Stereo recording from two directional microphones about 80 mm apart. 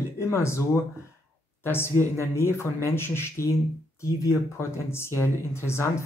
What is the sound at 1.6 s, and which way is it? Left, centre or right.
Speech, left.